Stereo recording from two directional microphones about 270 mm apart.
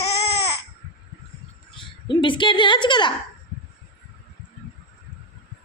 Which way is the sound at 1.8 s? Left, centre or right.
Centre.